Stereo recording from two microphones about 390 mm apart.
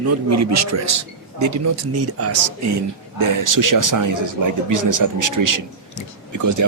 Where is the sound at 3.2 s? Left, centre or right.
Right.